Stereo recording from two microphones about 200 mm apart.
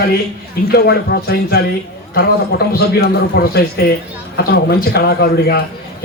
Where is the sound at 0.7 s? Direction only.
50° left (ahead or behind).